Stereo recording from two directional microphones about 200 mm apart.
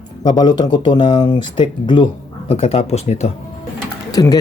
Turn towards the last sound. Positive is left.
turn(degrees=20)  # may be behind; listen again after turning